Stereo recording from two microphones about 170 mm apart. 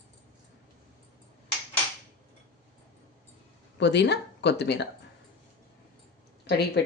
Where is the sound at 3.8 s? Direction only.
90° left.